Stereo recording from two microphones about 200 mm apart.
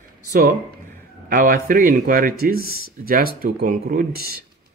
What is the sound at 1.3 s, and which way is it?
Speech, 45° right (ahead or behind).